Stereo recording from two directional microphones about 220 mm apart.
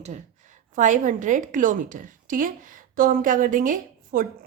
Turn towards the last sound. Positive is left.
turn(degrees=-40)  # may be behind; listen again after turning